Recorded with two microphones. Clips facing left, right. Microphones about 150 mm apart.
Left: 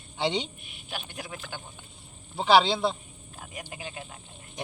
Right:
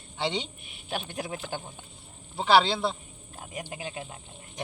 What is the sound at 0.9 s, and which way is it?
Speech, 25° right (ahead or behind).